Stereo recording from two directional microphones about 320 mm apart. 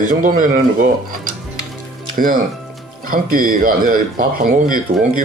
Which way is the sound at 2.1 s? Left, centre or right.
Right.